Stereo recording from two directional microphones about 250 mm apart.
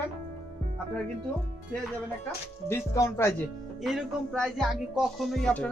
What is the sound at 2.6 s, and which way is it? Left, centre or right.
Speech, centre.